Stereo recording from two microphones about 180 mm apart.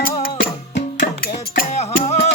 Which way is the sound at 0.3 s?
55° left (ahead or behind).